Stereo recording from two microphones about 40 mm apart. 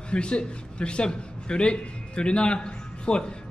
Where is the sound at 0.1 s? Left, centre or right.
Left.